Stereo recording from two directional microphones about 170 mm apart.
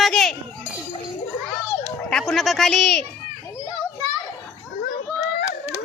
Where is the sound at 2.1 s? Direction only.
Centre (ahead or behind).